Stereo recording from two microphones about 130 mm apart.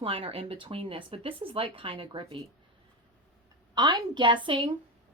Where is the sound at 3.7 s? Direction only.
30° right (ahead or behind).